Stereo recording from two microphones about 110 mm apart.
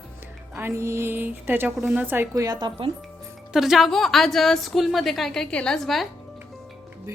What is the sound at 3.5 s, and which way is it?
A woman's voice, 5° right (ahead or behind).